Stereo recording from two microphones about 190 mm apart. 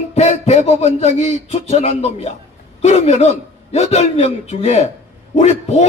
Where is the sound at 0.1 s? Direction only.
35° left (ahead or behind).